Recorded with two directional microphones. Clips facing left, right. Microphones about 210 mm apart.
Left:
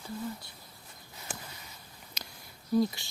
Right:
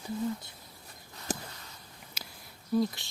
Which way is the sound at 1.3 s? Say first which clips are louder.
Right 8 dB; 40° right (ahead or behind).